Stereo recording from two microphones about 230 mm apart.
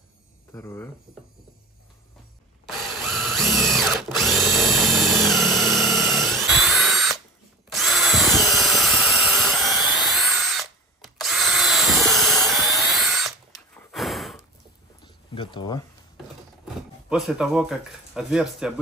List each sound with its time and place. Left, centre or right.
0.5 s speech: centre
2.6 s drill: centre
6.4 s tools: centre
7.7 s drill: centre
12.1 s a sound: centre
12.4 s tools: centre
13.9 s sigh: centre
15.3 s a sound: left
17.1 s speech: centre